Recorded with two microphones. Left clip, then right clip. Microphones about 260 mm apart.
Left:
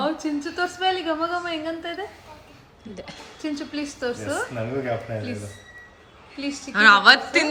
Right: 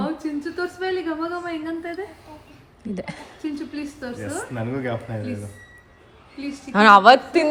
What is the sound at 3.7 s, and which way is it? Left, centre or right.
Speech, centre.